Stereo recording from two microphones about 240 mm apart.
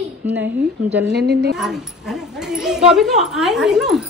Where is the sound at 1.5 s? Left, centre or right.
Centre.